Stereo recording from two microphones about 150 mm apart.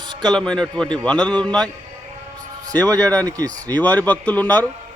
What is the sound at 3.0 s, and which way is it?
Speech, 10° left (ahead or behind).